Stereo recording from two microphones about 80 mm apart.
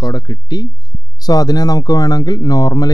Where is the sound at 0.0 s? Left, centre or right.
Left.